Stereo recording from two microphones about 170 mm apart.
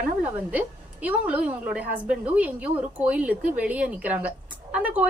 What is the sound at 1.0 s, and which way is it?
Speech, 10° right (ahead or behind).